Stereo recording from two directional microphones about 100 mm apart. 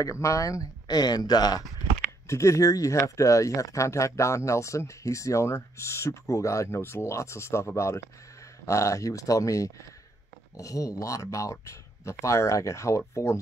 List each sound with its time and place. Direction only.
0.0 s speech: 30° left (ahead or behind)
2.2 s speech: 30° left (ahead or behind)